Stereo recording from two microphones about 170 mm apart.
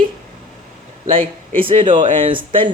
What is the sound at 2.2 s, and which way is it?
Speech, 30° right (ahead or behind).